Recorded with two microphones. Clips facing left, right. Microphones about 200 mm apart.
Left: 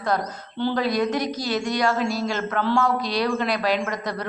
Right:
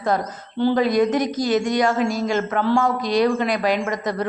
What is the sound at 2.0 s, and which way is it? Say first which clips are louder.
Speech: right 3 dB; 50° right (ahead or behind).